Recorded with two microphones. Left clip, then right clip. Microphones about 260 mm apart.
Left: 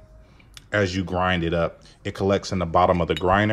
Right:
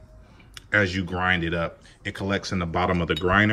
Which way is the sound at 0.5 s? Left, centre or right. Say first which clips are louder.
Right 1 dB; centre.